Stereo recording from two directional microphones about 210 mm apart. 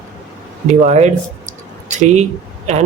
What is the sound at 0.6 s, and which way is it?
Speech, 35° right (ahead or behind).